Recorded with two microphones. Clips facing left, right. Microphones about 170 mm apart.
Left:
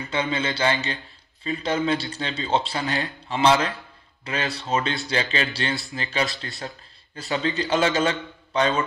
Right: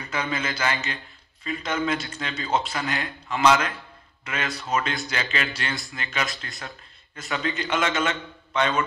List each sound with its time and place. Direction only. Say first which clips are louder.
0.2 s a man's voice: left 4 dB; 30° left (ahead or behind)